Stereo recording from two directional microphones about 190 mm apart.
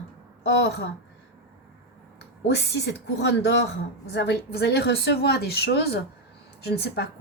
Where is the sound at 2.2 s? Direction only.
60° left (ahead or behind).